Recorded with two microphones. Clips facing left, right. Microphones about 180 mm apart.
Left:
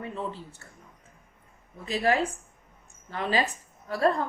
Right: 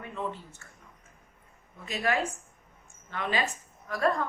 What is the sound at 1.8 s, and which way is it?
A woman's voice, 35° left (ahead or behind).